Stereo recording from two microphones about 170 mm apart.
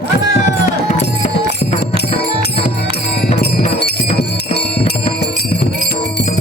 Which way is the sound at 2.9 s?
70° left (ahead or behind).